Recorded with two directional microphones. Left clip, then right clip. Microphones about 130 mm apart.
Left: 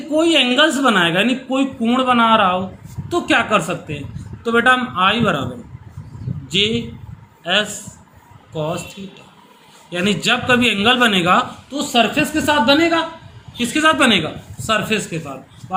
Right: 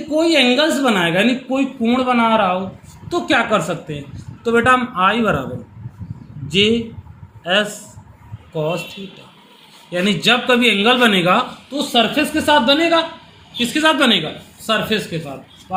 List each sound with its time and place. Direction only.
0.4 s a woman's voice: 15° right (ahead or behind); by 5.5 s 35° right (ahead or behind)
6.5 s a man's voice: 35° right (ahead or behind)
9.9 s a man's voice: 35° right (ahead or behind)
13.6 s a woman's voice: 30° right (ahead or behind)